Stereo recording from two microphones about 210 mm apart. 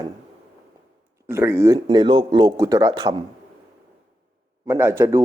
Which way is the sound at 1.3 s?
10° right (ahead or behind).